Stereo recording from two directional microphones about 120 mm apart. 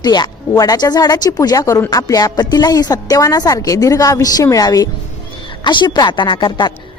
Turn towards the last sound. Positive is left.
turn(degrees=40)  # may be behind; listen again after turning